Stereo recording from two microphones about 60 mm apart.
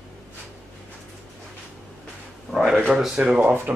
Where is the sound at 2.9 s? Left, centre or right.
Centre.